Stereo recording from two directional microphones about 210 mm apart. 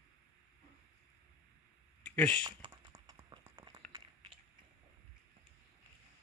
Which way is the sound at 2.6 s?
20° right (ahead or behind).